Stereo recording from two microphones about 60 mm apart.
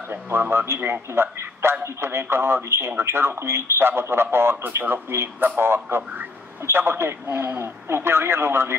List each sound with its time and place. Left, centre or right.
0.1 s speech: right